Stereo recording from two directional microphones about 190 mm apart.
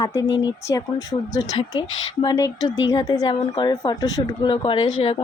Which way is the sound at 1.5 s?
25° left (ahead or behind).